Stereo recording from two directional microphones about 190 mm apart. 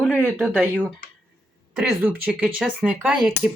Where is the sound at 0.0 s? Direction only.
Centre (ahead or behind).